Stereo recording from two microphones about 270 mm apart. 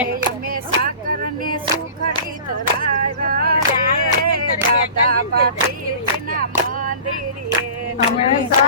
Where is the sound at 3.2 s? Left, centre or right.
Right.